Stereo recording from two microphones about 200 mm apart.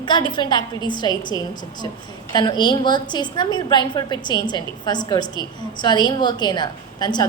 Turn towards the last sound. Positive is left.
turn(degrees=20)  # may be behind; listen again after turning